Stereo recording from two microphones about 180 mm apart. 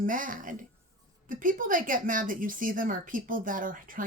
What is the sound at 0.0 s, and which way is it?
A woman's voice, 50° right (ahead or behind).